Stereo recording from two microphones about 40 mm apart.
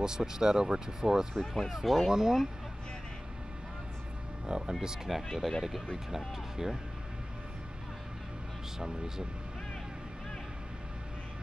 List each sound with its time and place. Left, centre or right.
0.0 s speech: centre
1.3 s speech: centre
1.7 s speech: centre
4.5 s speech: centre
5.4 s speech: centre
6.1 s speech: centre
8.7 s speech: centre